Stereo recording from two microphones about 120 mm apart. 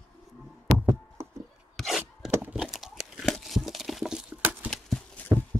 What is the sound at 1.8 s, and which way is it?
Chopping, centre (ahead or behind).